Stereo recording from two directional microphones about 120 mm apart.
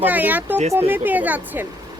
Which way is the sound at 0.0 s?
15° right (ahead or behind).